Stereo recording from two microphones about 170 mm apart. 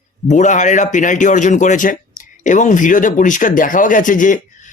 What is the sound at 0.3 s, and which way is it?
Speech, 45° left (ahead or behind).